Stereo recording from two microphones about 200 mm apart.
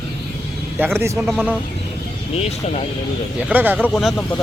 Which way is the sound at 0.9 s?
15° right (ahead or behind).